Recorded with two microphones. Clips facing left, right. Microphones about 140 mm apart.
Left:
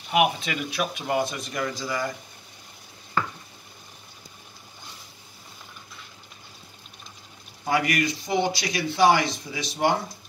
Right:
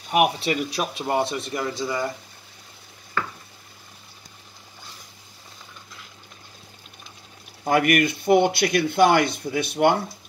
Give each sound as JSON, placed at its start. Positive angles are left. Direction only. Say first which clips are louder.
{"t": 0.1, "sound": "speech", "louder": "right 2 dB", "side_deg": -35}
{"t": 7.6, "sound": "speech", "louder": "right 5 dB", "side_deg": -55}